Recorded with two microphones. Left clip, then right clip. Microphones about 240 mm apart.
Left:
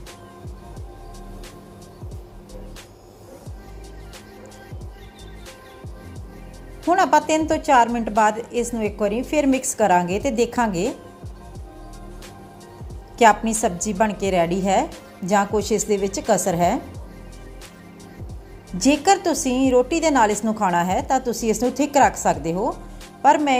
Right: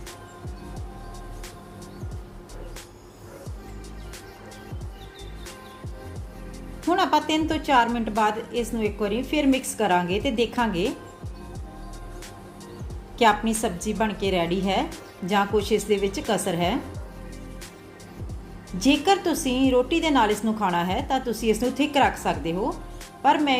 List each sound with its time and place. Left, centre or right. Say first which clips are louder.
6.8 s speech: left 5 dB; left
13.1 s speech: left 5 dB; left
19.0 s speech: left 4 dB; left